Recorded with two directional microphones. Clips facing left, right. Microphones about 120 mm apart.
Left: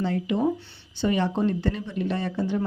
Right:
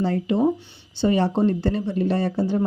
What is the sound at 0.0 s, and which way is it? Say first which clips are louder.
Speech: right 4 dB; 35° right (ahead or behind).